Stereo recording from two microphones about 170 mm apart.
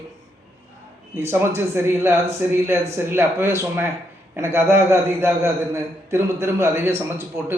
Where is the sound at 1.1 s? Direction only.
15° right (ahead or behind).